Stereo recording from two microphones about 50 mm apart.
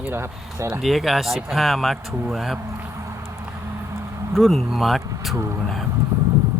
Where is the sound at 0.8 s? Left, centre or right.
Centre.